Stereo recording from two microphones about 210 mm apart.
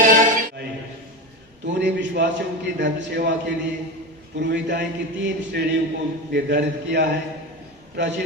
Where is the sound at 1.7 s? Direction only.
55° right (ahead or behind).